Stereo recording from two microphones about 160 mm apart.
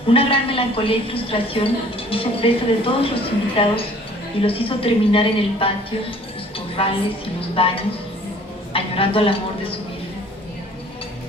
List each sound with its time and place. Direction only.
0.1 s a woman's voice: 35° left (ahead or behind)